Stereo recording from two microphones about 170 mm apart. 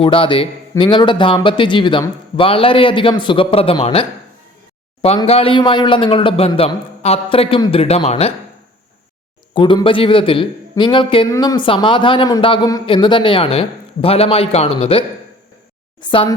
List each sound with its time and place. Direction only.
0.0 s a man's voice: 30° left (ahead or behind)
5.0 s a man's voice: 35° left (ahead or behind)
9.6 s a man's voice: 30° left (ahead or behind)